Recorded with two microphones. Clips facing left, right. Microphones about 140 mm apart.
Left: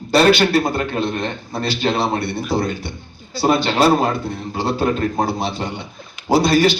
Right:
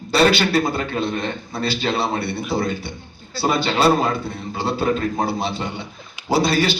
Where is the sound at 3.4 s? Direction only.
45° left (ahead or behind).